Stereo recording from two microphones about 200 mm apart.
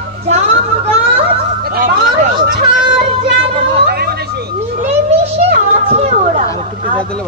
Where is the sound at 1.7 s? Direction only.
45° right (ahead or behind).